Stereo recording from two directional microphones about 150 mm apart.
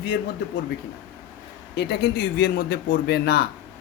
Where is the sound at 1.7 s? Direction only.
90° left.